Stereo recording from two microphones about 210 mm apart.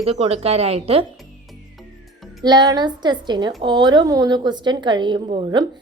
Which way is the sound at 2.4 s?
20° right (ahead or behind).